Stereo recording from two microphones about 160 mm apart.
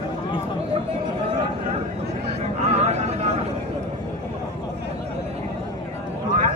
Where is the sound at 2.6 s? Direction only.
45° right (ahead or behind).